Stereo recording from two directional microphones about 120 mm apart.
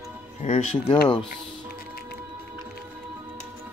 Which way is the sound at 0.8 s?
45° left (ahead or behind).